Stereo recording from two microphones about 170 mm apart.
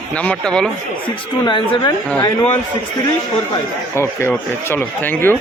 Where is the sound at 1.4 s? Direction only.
25° left (ahead or behind).